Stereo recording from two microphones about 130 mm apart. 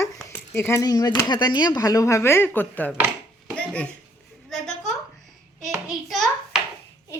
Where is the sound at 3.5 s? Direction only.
10° left (ahead or behind).